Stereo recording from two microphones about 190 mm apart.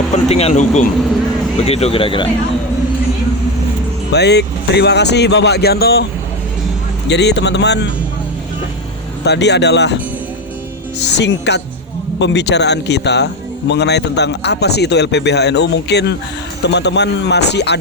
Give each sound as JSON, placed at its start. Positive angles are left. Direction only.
{"t": 0.3, "sound": "speech", "side_deg": 35}
{"t": 4.1, "sound": "a man's voice", "side_deg": 60}
{"t": 7.1, "sound": "a man's voice", "side_deg": 65}
{"t": 9.2, "sound": "a man's voice", "side_deg": 60}
{"t": 11.2, "sound": "a man's voice", "side_deg": 65}